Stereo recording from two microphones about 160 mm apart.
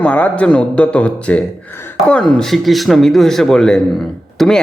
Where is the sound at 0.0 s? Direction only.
10° left (ahead or behind).